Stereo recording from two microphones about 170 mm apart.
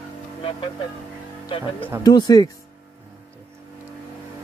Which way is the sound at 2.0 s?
25° left (ahead or behind).